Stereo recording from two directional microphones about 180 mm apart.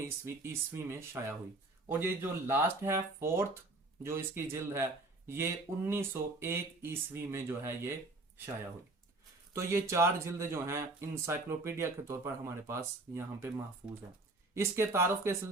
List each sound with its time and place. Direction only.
0.0 s speech: 15° right (ahead or behind)
9.5 s speech: 15° right (ahead or behind)
14.5 s speech: 15° right (ahead or behind)